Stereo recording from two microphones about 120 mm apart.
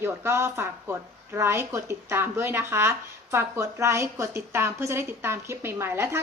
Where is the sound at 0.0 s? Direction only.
20° right (ahead or behind).